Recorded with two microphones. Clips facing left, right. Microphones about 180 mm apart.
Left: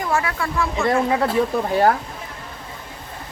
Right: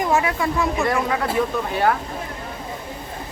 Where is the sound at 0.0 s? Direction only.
20° right (ahead or behind).